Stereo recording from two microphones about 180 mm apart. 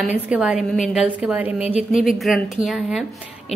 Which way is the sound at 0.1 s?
5° right (ahead or behind).